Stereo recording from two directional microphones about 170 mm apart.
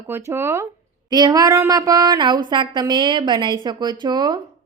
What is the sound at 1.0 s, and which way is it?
Speech, 25° right (ahead or behind).